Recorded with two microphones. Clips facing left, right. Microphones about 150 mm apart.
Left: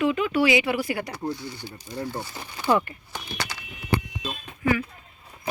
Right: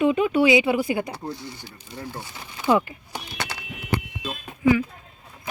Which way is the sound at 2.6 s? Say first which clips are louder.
Right 2 dB; 10° right (ahead or behind).